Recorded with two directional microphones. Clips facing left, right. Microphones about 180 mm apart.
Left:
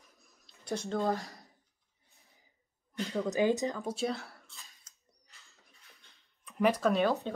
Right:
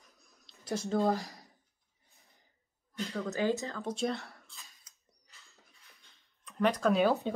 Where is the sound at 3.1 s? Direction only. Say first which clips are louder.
Left 3 dB; 15° left (ahead or behind).